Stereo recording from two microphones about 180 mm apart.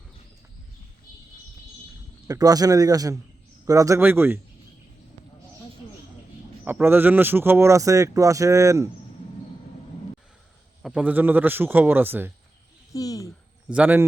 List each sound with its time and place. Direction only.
2.2 s a man's voice: 20° right (ahead or behind)
6.7 s speech: 10° right (ahead or behind)
10.8 s speech: 5° right (ahead or behind)
12.9 s speech: 20° left (ahead or behind)
13.7 s speech: 10° right (ahead or behind)